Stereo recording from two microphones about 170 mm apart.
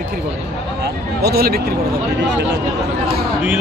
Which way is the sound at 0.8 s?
70° right (ahead or behind).